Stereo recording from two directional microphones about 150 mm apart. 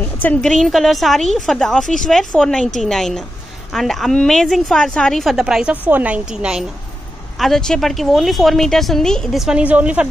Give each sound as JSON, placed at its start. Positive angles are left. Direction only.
{"t": 0.0, "sound": "a woman's voice", "side_deg": 10}